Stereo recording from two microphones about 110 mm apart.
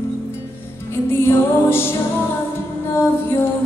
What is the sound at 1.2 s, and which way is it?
Music, 20° left (ahead or behind).